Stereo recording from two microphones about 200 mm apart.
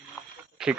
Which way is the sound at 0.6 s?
5° right (ahead or behind).